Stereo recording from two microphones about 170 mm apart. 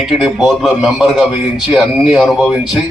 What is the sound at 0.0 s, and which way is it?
A man's voice, centre (ahead or behind).